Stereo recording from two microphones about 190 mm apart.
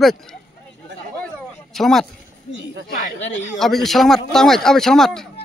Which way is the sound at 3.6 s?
Centre (ahead or behind).